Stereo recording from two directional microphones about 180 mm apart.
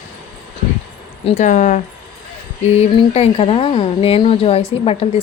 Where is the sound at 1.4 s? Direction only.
40° left (ahead or behind).